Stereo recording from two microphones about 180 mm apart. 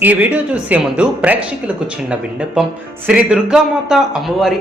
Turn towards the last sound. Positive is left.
turn(degrees=0)  # may be behind; listen again after turning